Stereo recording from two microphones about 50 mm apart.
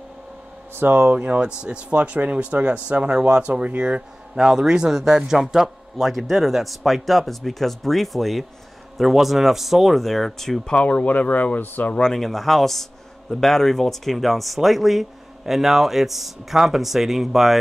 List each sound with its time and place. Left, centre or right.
0.7 s speech: right
1.1 s speech: right; by 10.6 s centre
10.7 s speech: left
12.0 s speech: centre